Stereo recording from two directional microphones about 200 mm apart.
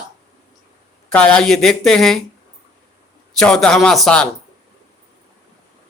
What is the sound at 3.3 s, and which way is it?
Speech, centre (ahead or behind).